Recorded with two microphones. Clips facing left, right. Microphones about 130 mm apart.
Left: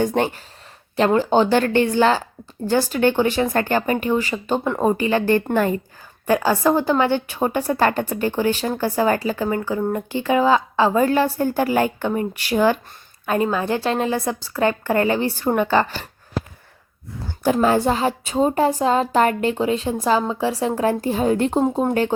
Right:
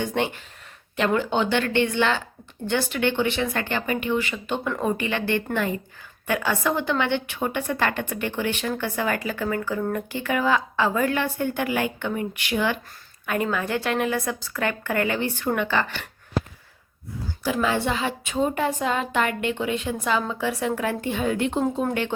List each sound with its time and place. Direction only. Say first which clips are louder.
0.0 s speech: left 5 dB; 40° left (ahead or behind)
17.2 s speech: left 7 dB; 45° left (ahead or behind)
21.6 s speech: left 5 dB; 25° left (ahead or behind)